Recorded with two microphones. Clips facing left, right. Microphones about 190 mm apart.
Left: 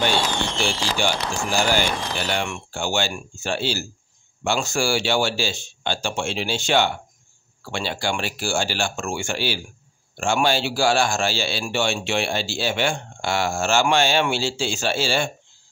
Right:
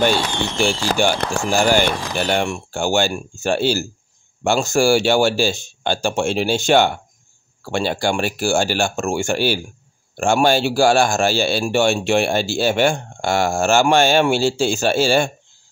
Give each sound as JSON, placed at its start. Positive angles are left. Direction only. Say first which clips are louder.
{"t": 0.6, "sound": "a man's voice", "louder": "right 9 dB", "side_deg": -50}